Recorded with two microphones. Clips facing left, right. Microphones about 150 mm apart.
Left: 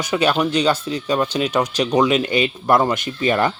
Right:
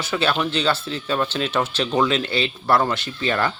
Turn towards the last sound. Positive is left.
turn(degrees=15)  # may be behind; listen again after turning